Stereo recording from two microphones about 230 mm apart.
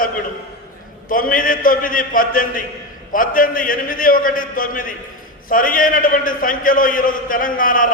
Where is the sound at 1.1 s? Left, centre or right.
Left.